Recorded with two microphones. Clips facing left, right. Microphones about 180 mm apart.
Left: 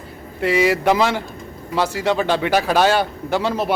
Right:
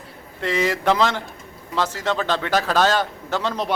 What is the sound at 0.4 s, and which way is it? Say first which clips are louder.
A man's voice: left 4 dB; 10° left (ahead or behind).